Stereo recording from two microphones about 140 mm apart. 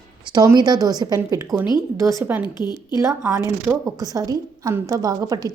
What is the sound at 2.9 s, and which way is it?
A woman's voice, 20° right (ahead or behind).